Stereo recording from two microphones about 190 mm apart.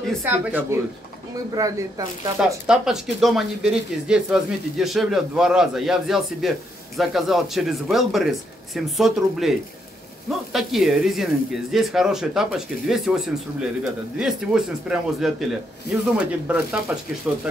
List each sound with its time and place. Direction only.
0.2 s speech: 10° right (ahead or behind)
2.3 s speech: 5° right (ahead or behind)